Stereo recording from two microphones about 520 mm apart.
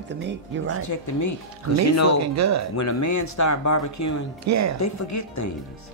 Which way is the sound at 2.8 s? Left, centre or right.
Left.